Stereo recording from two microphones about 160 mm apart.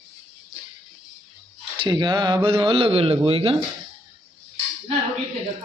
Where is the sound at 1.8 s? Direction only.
25° right (ahead or behind).